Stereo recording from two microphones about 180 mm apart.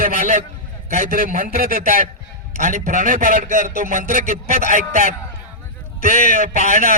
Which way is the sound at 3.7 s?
45° left (ahead or behind).